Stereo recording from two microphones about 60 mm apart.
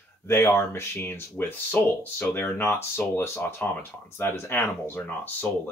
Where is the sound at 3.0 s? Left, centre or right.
Left.